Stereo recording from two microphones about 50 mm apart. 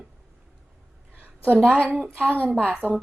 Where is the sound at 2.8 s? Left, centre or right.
Left.